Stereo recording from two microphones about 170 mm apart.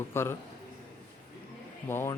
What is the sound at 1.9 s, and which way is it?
Speech, 15° left (ahead or behind).